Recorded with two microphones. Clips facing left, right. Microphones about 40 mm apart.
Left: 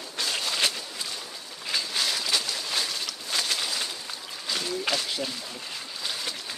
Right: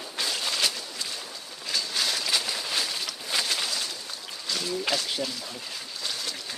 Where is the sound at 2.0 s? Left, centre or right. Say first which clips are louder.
Right 1 dB; centre.